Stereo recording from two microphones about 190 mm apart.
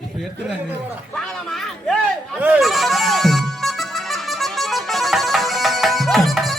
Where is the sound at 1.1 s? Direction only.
5° left (ahead or behind).